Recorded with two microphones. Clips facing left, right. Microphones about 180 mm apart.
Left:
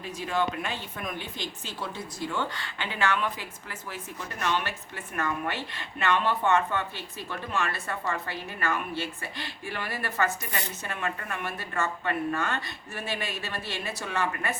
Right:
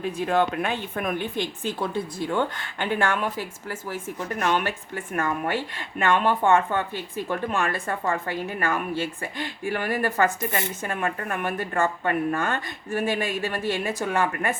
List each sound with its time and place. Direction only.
0.0 s speech: 55° right (ahead or behind)